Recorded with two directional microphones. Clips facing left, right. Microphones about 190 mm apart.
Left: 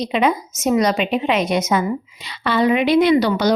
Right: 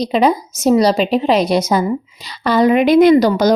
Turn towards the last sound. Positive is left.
turn(degrees=-45)  # may be behind; listen again after turning